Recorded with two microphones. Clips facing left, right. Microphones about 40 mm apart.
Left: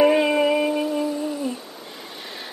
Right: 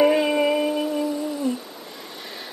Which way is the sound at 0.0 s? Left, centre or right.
Centre.